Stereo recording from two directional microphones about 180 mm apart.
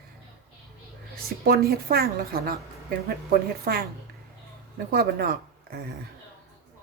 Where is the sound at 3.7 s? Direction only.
55° right (ahead or behind).